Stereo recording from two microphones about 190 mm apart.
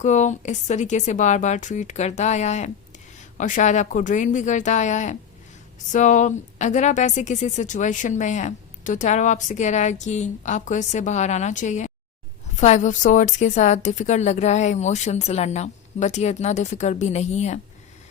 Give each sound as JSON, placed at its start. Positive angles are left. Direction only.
{"t": 0.0, "sound": "a woman's voice", "side_deg": 40}